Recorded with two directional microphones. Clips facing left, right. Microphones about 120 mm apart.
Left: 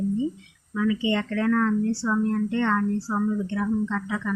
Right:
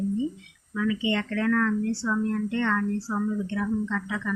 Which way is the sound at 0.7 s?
30° left (ahead or behind).